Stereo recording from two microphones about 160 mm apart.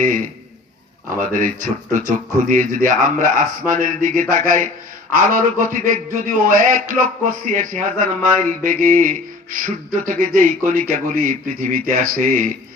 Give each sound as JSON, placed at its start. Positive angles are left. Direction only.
{"t": 1.1, "sound": "a man's voice", "side_deg": -55}